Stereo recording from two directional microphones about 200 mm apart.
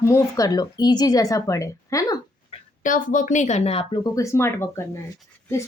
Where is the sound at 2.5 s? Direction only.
40° left (ahead or behind).